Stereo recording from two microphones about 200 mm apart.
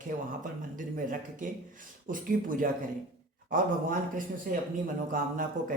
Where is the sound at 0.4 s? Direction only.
40° right (ahead or behind).